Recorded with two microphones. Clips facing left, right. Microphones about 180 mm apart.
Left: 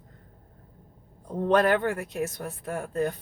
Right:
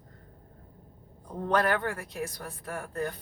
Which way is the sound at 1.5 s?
20° left (ahead or behind).